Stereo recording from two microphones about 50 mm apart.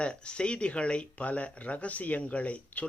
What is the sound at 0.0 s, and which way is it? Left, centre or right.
Speech, left.